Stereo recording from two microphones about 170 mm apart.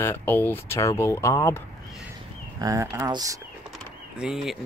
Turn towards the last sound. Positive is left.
turn(degrees=0)  # may be behind; listen again after turning